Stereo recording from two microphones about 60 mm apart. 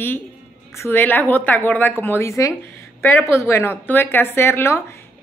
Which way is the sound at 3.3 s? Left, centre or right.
Left.